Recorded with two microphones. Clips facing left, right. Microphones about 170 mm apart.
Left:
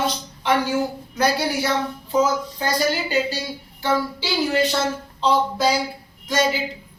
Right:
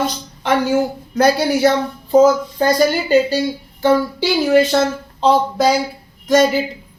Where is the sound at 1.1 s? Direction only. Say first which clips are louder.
Right 7 dB; 45° right (ahead or behind).